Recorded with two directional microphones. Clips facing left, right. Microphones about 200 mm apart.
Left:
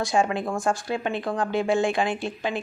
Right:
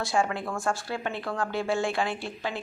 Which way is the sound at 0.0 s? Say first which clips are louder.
Left 4 dB; 15° left (ahead or behind).